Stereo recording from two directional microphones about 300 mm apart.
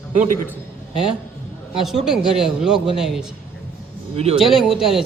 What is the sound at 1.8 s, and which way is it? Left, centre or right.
A man's voice, centre.